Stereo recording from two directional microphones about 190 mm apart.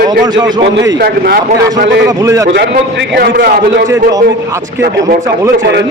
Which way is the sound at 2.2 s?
15° right (ahead or behind).